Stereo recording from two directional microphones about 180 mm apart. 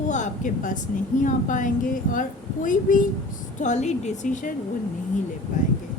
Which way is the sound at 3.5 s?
40° left (ahead or behind).